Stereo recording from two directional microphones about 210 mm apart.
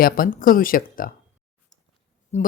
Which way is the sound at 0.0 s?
40° left (ahead or behind).